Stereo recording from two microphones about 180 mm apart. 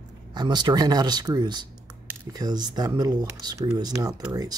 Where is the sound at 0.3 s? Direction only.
25° right (ahead or behind).